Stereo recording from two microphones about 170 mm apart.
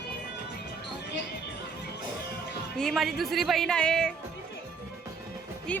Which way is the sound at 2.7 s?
Centre (ahead or behind).